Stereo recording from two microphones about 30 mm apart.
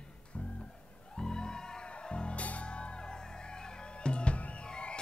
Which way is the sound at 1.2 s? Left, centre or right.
Left.